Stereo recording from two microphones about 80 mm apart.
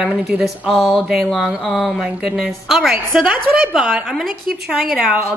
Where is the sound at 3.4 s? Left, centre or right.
Right.